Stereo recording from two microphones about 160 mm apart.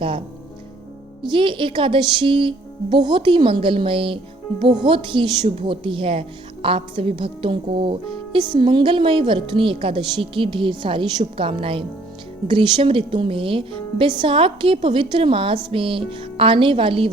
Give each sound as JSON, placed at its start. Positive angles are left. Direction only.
{"t": 1.2, "sound": "a woman's voice", "side_deg": -30}